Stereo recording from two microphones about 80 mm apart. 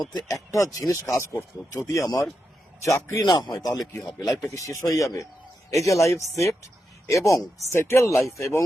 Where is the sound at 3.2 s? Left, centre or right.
Left.